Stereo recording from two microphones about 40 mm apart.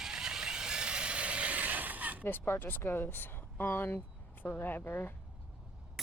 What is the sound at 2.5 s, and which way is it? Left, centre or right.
Speech, left.